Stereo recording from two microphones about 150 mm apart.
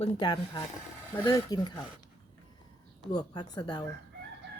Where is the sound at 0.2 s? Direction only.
30° left (ahead or behind).